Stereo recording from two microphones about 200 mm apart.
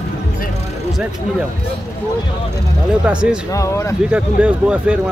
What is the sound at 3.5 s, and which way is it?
Speech, 15° left (ahead or behind).